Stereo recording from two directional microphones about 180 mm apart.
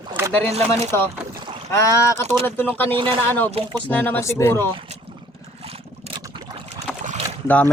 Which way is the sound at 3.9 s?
10° left (ahead or behind).